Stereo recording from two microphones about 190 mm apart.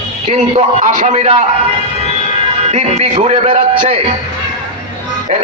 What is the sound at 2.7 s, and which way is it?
A man's voice, 35° right (ahead or behind).